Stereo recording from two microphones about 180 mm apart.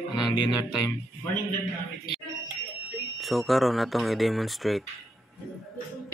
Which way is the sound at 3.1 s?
Centre (ahead or behind).